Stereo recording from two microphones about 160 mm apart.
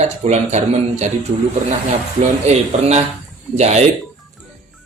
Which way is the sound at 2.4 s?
40° right (ahead or behind).